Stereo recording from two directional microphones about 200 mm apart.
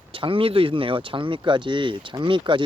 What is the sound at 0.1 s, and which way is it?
Speech, 25° right (ahead or behind).